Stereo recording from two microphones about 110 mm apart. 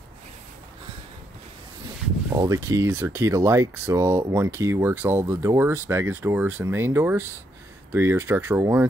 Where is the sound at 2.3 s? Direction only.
30° right (ahead or behind).